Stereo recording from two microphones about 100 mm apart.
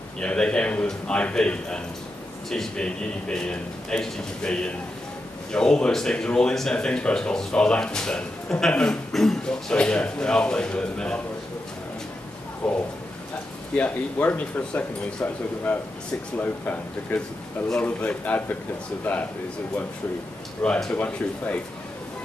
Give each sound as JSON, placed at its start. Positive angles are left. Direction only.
{"t": 0.2, "sound": "speech", "side_deg": 10}
{"t": 12.6, "sound": "speech", "side_deg": 10}
{"t": 20.6, "sound": "speech", "side_deg": 10}